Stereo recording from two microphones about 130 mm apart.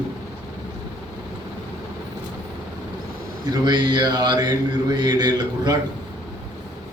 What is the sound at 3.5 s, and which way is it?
Speech, 35° right (ahead or behind).